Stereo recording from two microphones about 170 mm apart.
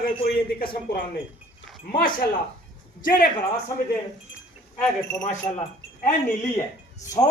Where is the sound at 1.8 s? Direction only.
60° left (ahead or behind).